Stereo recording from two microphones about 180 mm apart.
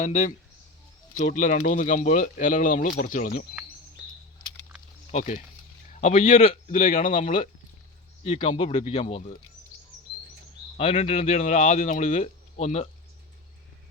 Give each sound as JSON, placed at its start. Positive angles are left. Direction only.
{"t": 0.0, "sound": "speech", "side_deg": 40}
{"t": 5.1, "sound": "speech", "side_deg": 40}
{"t": 8.2, "sound": "speech", "side_deg": 30}
{"t": 10.8, "sound": "speech", "side_deg": 35}